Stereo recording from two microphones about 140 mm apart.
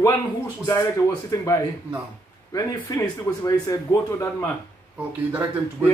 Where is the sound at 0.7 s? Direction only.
20° left (ahead or behind).